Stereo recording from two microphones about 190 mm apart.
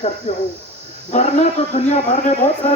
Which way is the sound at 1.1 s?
35° left (ahead or behind).